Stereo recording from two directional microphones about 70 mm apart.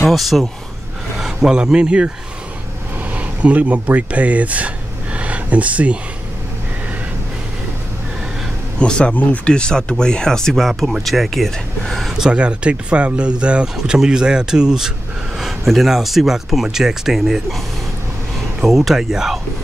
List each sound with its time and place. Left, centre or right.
0.1 s speech: centre
3.2 s speech: right
8.7 s speech: centre
9.1 s speech: left; by 12.1 s centre
12.2 s speech: centre
18.6 s speech: centre